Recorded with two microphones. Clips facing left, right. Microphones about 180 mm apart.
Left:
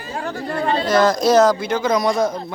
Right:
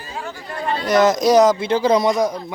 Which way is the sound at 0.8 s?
20° right (ahead or behind).